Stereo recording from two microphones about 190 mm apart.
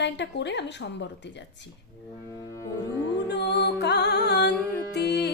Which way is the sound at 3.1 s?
65° left (ahead or behind).